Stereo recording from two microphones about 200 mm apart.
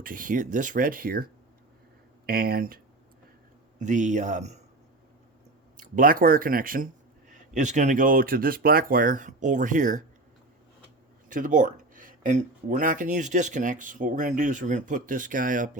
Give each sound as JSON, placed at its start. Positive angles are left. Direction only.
{"t": 0.0, "sound": "speech", "side_deg": -45}
{"t": 5.7, "sound": "speech", "side_deg": -45}
{"t": 11.3, "sound": "speech", "side_deg": -40}